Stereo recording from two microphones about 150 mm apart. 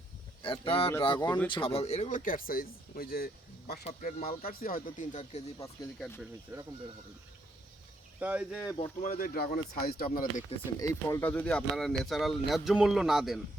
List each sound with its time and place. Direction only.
0.4 s speech: 35° left (ahead or behind); by 3.8 s 90° left
4.3 s speech: 75° left (ahead or behind); by 5.4 s 55° left (ahead or behind)
5.5 s speech: 20° left (ahead or behind)
6.5 s speech: 15° right (ahead or behind)
8.2 s speech: 10° right (ahead or behind)
9.0 s speech: 65° left (ahead or behind); by 10.2 s 85° left
10.8 s speech: 20° left (ahead or behind); by 13.4 s centre (ahead or behind)